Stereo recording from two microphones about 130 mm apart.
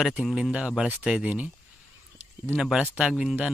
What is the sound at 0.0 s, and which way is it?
A man's voice, 5° right (ahead or behind).